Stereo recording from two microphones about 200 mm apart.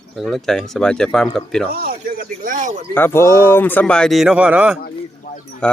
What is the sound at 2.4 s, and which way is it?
Speech, 40° right (ahead or behind).